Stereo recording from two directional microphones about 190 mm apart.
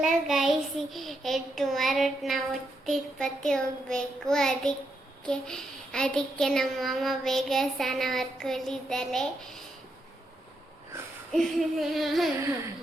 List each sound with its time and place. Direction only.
0.0 s child singing: centre (ahead or behind)
2.8 s a child's voice: centre (ahead or behind)
11.3 s a child's voice: centre (ahead or behind)